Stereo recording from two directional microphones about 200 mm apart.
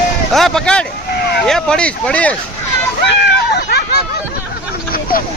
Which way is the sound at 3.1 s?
55° left (ahead or behind).